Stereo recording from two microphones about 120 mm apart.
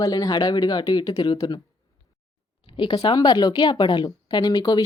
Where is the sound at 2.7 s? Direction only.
45° left (ahead or behind).